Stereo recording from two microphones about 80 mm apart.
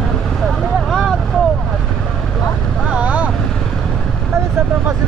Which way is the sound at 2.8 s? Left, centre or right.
Centre.